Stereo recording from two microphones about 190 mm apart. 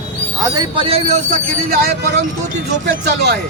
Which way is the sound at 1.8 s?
55° right (ahead or behind).